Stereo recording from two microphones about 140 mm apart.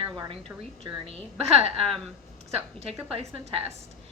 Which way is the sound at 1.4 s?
45° right (ahead or behind).